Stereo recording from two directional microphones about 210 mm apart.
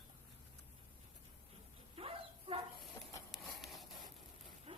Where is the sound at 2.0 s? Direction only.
25° right (ahead or behind).